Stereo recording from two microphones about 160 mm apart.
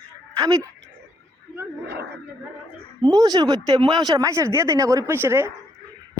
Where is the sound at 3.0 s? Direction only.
25° right (ahead or behind).